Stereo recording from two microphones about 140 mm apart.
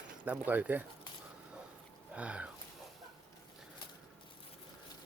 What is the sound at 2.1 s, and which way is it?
Speech, 10° right (ahead or behind).